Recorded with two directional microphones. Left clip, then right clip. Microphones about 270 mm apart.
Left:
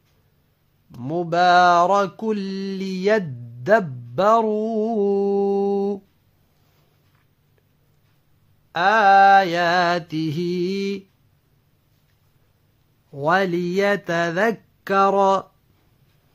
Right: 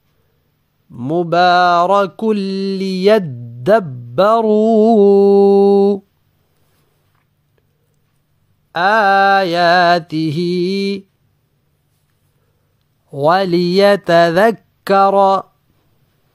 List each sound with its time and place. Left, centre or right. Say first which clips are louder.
0.9 s mantra: right 7 dB; right
8.7 s mantra: right 3 dB; right
13.1 s speech: right 7 dB; right